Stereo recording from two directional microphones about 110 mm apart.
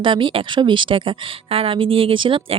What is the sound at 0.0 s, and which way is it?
Speech, 50° right (ahead or behind).